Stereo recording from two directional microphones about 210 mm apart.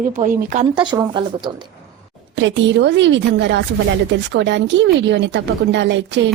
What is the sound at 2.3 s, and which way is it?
A woman's voice, 60° right (ahead or behind).